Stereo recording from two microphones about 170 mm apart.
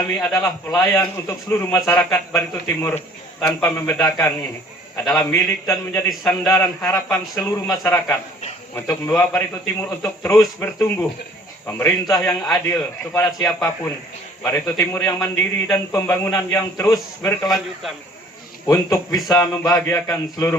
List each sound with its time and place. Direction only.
0.2 s a man's voice: 15° left (ahead or behind)
18.6 s a man's voice: 20° left (ahead or behind)